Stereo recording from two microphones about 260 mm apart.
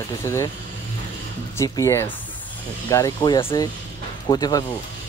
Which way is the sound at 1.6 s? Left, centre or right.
Centre.